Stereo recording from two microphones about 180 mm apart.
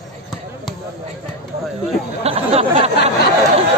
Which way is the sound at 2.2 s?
35° right (ahead or behind).